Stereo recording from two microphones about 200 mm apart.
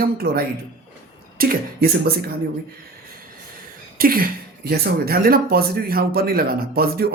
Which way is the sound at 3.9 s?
45° right (ahead or behind).